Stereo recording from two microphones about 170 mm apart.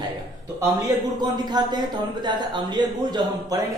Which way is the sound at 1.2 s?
25° right (ahead or behind).